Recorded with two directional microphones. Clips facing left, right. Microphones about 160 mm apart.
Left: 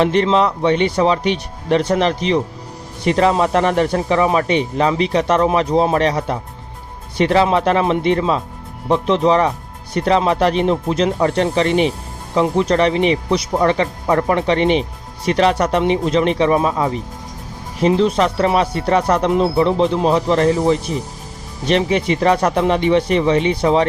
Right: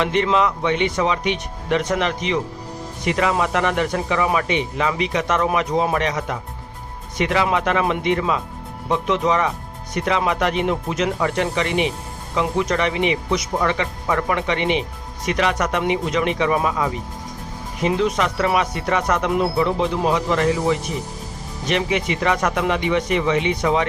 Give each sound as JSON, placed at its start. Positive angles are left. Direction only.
{"t": 0.0, "sound": "speech", "side_deg": 35}